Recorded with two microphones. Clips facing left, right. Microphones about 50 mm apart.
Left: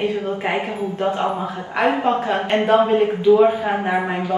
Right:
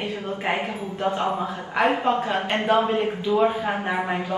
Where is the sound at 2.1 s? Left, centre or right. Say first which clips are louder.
Left 3 dB; centre.